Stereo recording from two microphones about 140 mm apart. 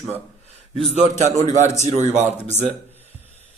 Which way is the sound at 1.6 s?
55° right (ahead or behind).